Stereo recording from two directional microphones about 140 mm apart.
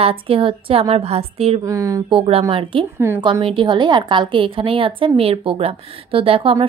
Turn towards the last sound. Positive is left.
turn(degrees=-40)  # may be behind; listen again after turning